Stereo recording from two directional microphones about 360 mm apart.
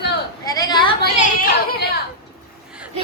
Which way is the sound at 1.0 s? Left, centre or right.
Left.